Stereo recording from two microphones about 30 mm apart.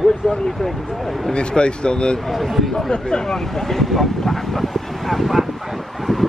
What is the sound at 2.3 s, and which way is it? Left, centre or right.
Speech, centre.